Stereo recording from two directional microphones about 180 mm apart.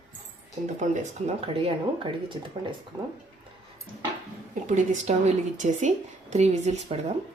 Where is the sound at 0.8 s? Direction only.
45° right (ahead or behind); by 2.7 s 25° right (ahead or behind).